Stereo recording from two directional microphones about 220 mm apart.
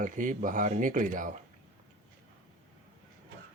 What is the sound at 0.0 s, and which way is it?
Speech, 35° right (ahead or behind).